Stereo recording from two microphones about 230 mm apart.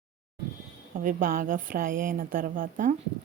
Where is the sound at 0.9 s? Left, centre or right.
Right.